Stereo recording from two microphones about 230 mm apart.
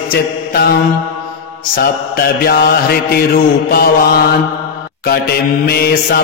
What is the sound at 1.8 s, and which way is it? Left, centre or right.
Mantra, left.